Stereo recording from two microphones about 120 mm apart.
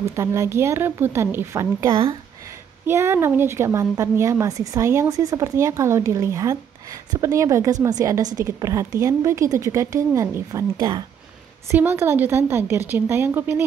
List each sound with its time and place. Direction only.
0.1 s a woman's voice: 25° right (ahead or behind)
1.9 s speech: 50° right (ahead or behind)
2.9 s a woman's voice: 20° right (ahead or behind)